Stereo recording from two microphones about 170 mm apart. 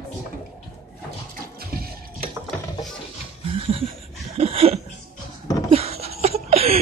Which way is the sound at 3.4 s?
35° right (ahead or behind).